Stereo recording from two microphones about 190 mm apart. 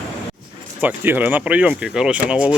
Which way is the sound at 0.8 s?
10° right (ahead or behind).